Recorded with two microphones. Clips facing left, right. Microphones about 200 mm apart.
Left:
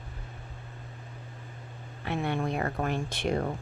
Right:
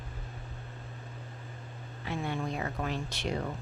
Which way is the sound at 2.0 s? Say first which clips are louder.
Left 4 dB; 65° left (ahead or behind).